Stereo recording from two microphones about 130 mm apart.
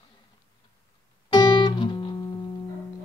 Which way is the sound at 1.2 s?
35° left (ahead or behind).